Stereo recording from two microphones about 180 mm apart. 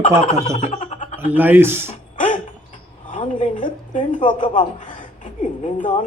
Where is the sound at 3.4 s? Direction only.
45° left (ahead or behind).